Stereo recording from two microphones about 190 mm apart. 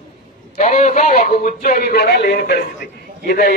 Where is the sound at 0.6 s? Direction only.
40° left (ahead or behind).